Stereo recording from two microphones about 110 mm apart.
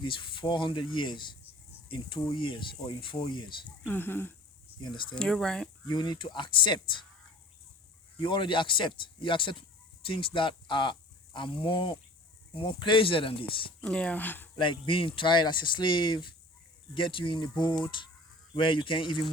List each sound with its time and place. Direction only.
0.0 s speech: 50° left (ahead or behind)
3.8 s speech: 20° left (ahead or behind)
4.8 s speech: 45° left (ahead or behind)
5.1 s speech: 5° left (ahead or behind)
5.9 s speech: 40° left (ahead or behind)
8.2 s speech: 45° left (ahead or behind)
13.8 s speech: 10° left (ahead or behind)
14.6 s speech: 50° left (ahead or behind)